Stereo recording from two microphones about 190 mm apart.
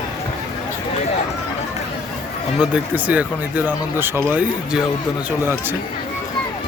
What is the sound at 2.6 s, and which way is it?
Speech, 5° right (ahead or behind).